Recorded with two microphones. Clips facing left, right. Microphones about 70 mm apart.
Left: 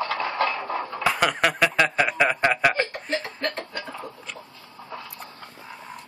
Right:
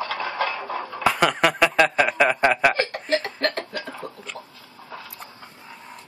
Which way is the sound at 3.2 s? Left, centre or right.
Right.